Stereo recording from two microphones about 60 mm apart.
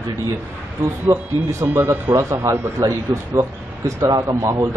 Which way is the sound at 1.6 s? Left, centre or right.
Right.